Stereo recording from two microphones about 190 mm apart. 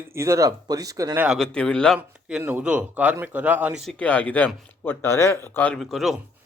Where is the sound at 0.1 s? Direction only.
15° right (ahead or behind); by 2.0 s 5° left (ahead or behind).